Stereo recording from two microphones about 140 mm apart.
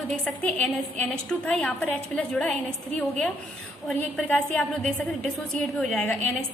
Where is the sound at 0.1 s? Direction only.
10° left (ahead or behind).